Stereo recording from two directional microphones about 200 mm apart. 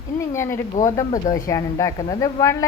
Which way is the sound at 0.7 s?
35° left (ahead or behind).